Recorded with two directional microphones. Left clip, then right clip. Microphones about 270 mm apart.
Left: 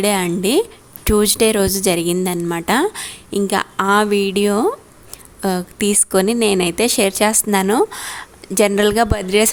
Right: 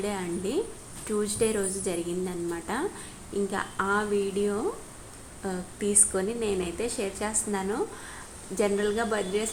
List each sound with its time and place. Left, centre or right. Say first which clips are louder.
0.0 s a woman's voice: left 14 dB; left